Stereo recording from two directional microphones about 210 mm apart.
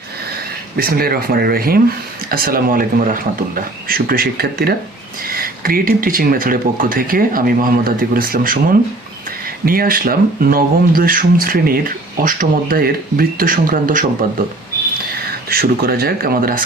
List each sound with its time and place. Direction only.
0.8 s speech: 45° right (ahead or behind)
9.6 s speech: 45° right (ahead or behind)